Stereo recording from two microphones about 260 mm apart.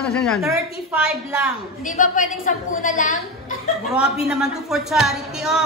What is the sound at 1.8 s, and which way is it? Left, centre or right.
A woman's voice, left.